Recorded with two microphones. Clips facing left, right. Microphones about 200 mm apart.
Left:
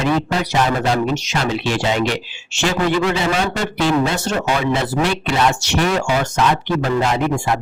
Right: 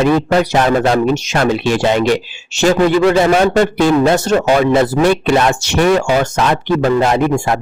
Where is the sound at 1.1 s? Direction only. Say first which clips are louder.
Right 6 dB; 50° right (ahead or behind).